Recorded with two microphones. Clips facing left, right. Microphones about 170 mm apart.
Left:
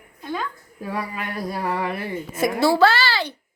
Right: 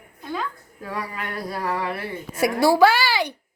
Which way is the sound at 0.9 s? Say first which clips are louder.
Left 1 dB; 15° left (ahead or behind).